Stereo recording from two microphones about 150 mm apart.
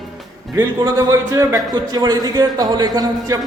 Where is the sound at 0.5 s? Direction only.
25° right (ahead or behind).